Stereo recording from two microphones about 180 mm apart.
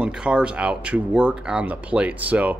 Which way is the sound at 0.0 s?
5° right (ahead or behind).